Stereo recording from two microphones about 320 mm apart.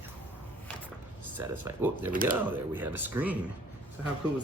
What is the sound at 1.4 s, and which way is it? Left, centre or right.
Speech, centre.